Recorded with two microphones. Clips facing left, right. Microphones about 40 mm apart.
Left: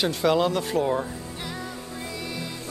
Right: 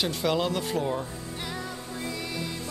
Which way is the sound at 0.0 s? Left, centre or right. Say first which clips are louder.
Left 5 dB; centre.